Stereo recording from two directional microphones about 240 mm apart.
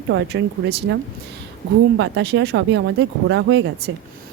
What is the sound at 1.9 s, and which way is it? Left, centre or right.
Speech, right.